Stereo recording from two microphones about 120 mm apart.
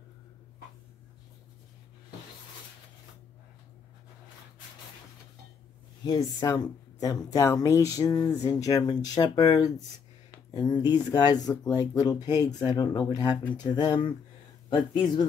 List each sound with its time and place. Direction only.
6.0 s speech: 30° left (ahead or behind)